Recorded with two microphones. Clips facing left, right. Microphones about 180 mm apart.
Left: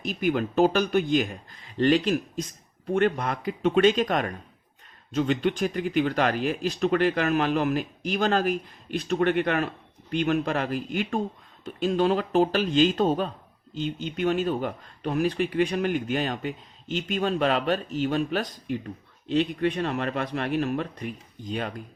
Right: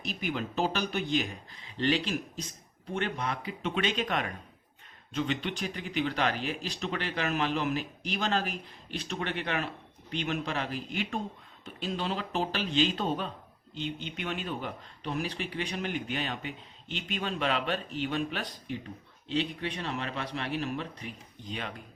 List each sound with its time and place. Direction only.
0.0 s speech: 50° left (ahead or behind)